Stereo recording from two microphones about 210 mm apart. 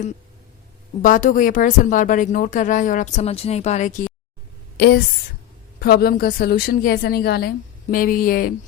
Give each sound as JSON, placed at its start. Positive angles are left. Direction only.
{"t": 1.0, "sound": "speech", "side_deg": 40}
{"t": 4.8, "sound": "a woman's voice", "side_deg": 45}